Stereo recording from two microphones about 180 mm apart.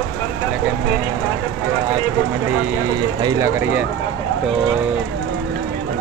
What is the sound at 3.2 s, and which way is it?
Speech, 15° right (ahead or behind).